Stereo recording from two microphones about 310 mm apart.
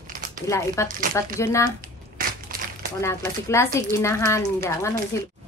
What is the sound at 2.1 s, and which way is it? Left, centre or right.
Crushing, right.